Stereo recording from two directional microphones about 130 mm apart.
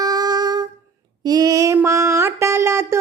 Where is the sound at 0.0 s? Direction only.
30° right (ahead or behind).